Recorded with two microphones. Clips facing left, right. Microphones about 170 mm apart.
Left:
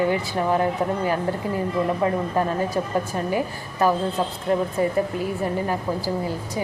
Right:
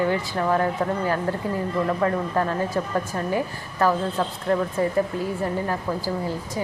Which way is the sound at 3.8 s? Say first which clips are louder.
Left 1 dB; 20° left (ahead or behind).